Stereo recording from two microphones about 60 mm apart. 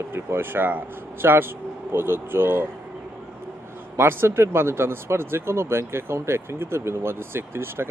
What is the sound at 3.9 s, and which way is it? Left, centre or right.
Speech, right.